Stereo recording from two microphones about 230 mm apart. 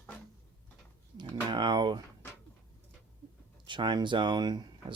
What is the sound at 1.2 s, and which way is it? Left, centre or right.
Typing, centre.